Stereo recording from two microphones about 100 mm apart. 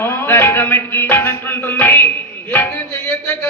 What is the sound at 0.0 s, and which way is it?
Speech, 20° left (ahead or behind).